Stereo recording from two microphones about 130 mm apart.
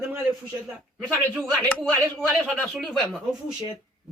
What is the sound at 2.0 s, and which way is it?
Speech, 10° right (ahead or behind).